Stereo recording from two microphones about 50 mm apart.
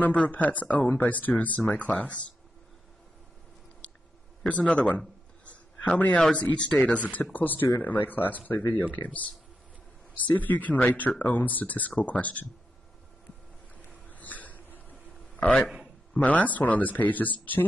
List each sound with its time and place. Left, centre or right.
0.0 s speech: left
4.5 s a sound: left
6.8 s speech: left
8.9 s speech: left
13.8 s a sound: left
15.6 s a man's voice: centre
16.3 s speech: left